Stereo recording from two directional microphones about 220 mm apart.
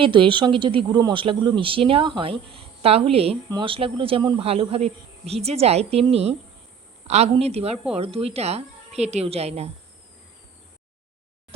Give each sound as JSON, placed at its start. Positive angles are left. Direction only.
{"t": 0.0, "sound": "speech", "side_deg": -20}